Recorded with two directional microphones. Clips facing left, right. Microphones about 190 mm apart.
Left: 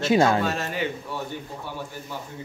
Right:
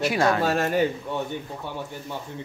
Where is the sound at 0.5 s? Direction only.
50° right (ahead or behind).